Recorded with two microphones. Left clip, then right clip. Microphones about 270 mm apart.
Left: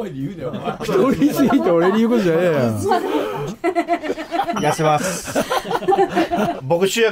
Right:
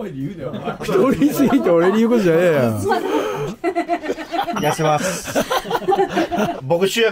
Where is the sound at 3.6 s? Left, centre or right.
Centre.